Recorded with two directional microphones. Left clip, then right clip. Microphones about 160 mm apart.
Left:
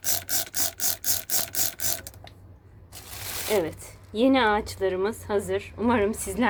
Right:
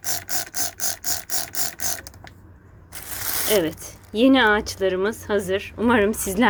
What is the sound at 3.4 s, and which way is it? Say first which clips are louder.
A woman's voice: right 4 dB; 25° right (ahead or behind).